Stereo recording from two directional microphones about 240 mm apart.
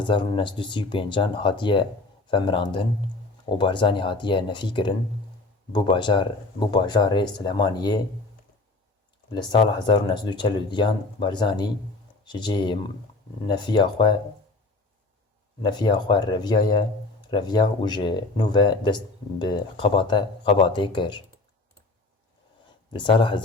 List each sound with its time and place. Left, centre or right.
0.1 s speech: centre
9.3 s speech: centre
15.6 s speech: centre
22.9 s speech: centre